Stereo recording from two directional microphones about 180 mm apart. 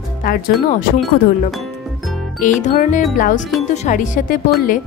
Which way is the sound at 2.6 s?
45° left (ahead or behind).